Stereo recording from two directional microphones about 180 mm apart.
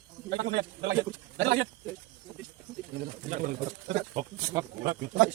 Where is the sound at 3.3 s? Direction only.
45° right (ahead or behind).